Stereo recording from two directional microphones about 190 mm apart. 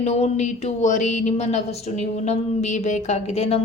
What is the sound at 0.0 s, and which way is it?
A woman's voice, 35° left (ahead or behind).